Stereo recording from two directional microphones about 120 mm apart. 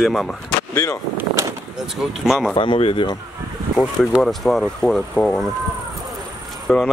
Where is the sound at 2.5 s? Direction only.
50° left (ahead or behind).